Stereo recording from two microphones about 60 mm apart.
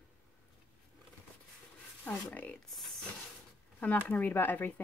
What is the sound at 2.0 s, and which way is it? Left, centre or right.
Speech, left.